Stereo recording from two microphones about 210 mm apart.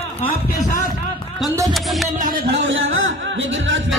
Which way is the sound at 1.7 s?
Centre (ahead or behind).